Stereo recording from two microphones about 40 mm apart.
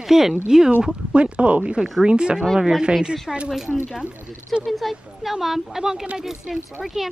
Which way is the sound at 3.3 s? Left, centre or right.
Centre.